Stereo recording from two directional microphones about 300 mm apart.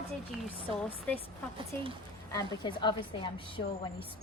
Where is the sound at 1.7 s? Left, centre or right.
Centre.